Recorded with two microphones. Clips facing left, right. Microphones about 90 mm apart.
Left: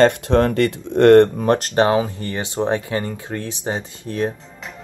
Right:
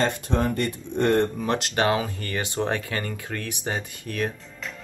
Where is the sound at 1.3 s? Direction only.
45° left (ahead or behind).